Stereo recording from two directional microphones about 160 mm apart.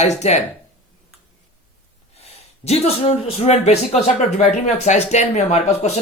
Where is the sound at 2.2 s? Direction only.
40° left (ahead or behind).